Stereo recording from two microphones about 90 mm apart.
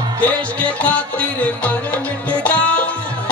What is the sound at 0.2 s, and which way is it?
Music, 15° left (ahead or behind).